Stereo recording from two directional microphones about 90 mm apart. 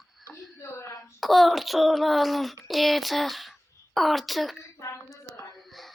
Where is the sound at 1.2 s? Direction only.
Centre (ahead or behind).